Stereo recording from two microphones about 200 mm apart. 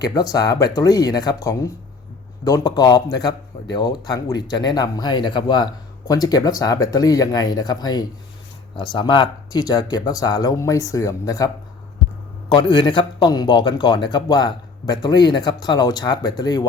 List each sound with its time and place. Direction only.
0.0 s speech: 20° left (ahead or behind)
12.5 s speech: 20° left (ahead or behind)